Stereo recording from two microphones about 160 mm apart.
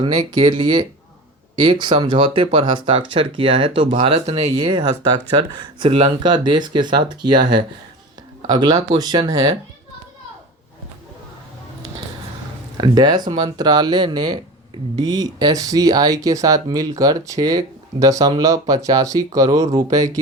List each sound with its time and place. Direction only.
0.0 s speech: 30° right (ahead or behind)
12.7 s speech: 25° right (ahead or behind)